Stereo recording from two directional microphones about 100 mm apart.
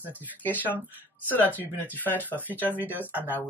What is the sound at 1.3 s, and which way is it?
Speech, 15° left (ahead or behind).